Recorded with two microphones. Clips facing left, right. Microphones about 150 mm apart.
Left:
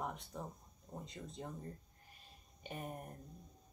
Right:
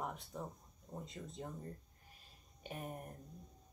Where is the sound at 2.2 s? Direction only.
Centre (ahead or behind).